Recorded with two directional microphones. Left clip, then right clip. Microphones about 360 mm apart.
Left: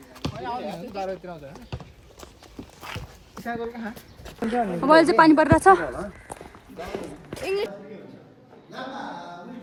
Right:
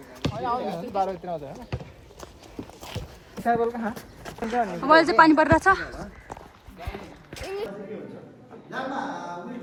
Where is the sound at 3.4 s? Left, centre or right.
Right.